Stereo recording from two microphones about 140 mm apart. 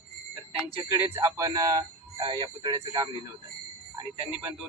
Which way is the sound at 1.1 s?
20° right (ahead or behind).